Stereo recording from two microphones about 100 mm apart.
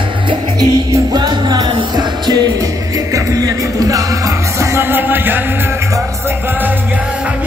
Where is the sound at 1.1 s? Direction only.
45° right (ahead or behind).